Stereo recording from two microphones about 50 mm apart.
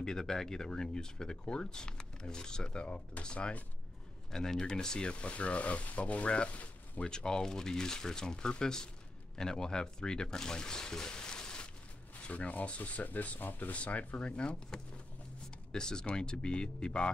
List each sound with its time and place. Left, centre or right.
0.0 s speech: centre
4.3 s speech: centre
12.2 s speech: left